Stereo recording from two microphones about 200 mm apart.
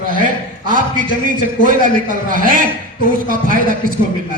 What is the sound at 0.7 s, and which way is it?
A man's voice, 40° right (ahead or behind).